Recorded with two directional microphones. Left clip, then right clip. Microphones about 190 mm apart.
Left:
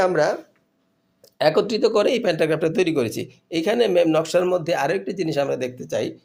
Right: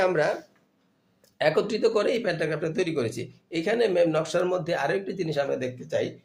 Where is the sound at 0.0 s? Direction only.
30° left (ahead or behind).